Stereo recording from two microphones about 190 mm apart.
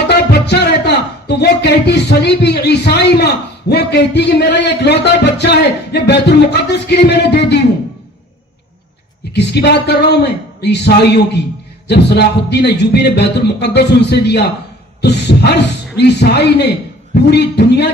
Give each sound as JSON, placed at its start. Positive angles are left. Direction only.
{"t": 0.1, "sound": "speech", "side_deg": 60}
{"t": 9.3, "sound": "speech", "side_deg": 65}